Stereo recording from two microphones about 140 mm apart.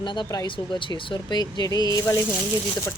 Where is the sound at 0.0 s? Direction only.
35° left (ahead or behind).